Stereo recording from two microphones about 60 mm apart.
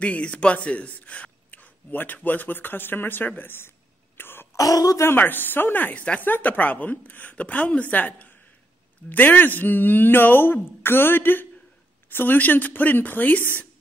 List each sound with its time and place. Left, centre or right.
0.0 s speech: left
4.2 s throat clearing: left
4.6 s speech: left
5.0 s a woman's voice: left